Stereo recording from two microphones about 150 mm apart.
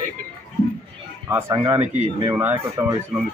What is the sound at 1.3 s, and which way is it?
Speech, 15° right (ahead or behind).